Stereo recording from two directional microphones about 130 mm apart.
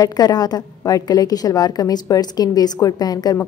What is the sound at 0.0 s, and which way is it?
A woman's voice, 30° left (ahead or behind).